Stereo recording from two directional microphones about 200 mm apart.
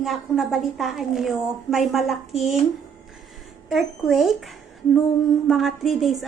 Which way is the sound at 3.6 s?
Centre (ahead or behind).